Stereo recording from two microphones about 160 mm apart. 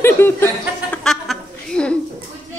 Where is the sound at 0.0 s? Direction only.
15° left (ahead or behind).